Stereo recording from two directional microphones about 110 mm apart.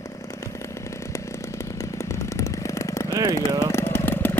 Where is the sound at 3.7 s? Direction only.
20° left (ahead or behind).